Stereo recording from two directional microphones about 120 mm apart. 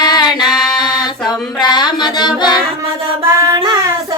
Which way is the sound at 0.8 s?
35° left (ahead or behind).